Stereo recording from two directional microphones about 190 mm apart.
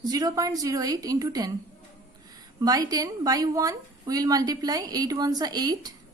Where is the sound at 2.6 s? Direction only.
20° right (ahead or behind).